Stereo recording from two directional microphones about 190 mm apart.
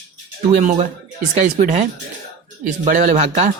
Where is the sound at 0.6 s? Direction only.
40° right (ahead or behind).